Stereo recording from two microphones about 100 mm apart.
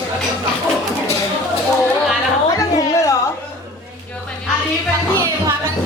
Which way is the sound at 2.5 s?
35° left (ahead or behind).